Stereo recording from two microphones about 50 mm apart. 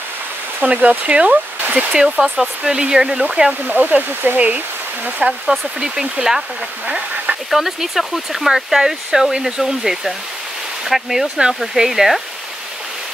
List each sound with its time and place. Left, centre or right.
0.6 s speech: right
2.0 s speech: centre
3.6 s speech: right
5.2 s speech: centre
7.5 s speech: centre